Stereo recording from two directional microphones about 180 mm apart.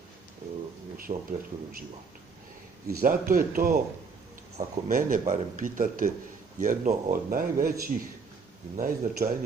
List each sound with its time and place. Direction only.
1.1 s a man's voice: 35° right (ahead or behind)
3.0 s speech: 50° right (ahead or behind)